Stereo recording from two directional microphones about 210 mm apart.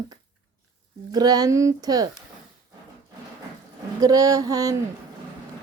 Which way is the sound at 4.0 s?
15° right (ahead or behind).